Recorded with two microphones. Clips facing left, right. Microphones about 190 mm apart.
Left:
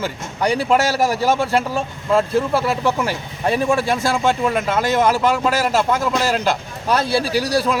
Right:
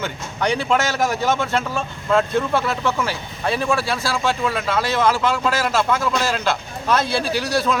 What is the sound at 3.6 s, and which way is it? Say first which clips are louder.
Speech: left 4 dB; 45° left (ahead or behind).